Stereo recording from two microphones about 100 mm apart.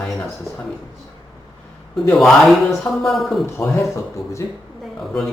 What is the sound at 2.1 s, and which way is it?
A man's voice, centre (ahead or behind).